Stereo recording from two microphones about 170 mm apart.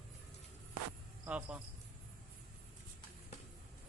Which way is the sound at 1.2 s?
10° right (ahead or behind).